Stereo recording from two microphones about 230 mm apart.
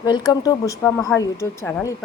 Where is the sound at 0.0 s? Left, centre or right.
Centre.